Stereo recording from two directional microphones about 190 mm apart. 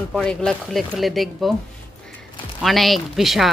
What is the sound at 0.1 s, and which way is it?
Speech, 5° left (ahead or behind).